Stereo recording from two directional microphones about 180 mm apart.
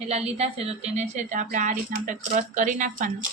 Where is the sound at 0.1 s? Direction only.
35° right (ahead or behind).